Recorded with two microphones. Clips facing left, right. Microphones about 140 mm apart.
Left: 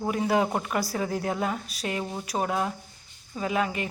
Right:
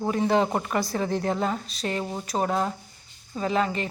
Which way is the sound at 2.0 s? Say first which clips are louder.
Right 2 dB; 5° right (ahead or behind).